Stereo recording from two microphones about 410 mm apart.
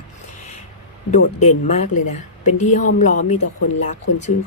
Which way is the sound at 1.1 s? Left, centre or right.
Centre.